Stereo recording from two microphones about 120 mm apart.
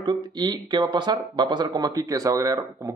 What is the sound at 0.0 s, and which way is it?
Speech, 40° right (ahead or behind).